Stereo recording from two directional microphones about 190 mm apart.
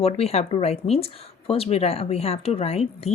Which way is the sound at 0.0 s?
30° left (ahead or behind).